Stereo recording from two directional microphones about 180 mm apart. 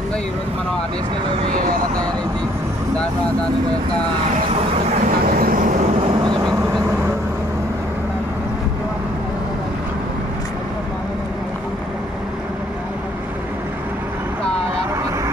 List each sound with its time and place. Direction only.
1.5 s speech: 50° right (ahead or behind)
5.2 s vehicle: 50° right (ahead or behind)
6.2 s vehicle: 25° right (ahead or behind)